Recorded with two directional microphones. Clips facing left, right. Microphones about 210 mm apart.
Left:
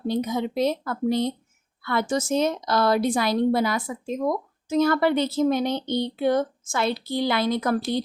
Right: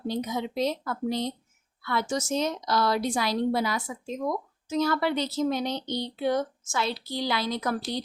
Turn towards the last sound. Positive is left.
turn(degrees=55)  # may be behind; listen again after turning